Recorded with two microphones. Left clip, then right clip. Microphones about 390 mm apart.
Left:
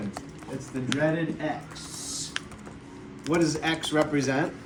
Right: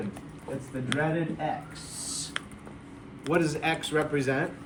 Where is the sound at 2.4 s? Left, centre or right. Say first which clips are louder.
Left 1 dB; centre.